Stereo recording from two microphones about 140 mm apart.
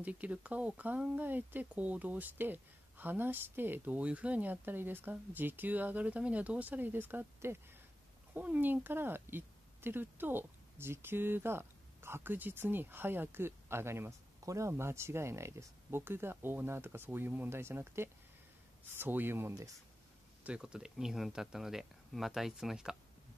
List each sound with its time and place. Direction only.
0.0 s speech: 10° right (ahead or behind)
20.4 s speech: 5° right (ahead or behind)